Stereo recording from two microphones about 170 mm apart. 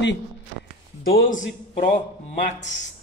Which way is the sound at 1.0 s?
60° left (ahead or behind).